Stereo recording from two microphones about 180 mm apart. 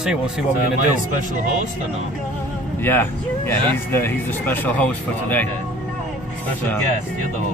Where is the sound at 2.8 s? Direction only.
10° left (ahead or behind).